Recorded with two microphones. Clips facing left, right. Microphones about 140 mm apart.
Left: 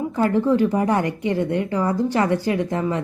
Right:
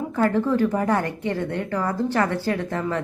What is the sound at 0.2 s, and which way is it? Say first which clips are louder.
Speech: left 2 dB; 15° left (ahead or behind).